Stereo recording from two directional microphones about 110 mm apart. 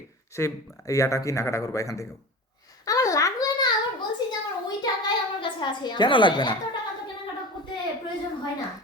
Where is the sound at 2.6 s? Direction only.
35° left (ahead or behind).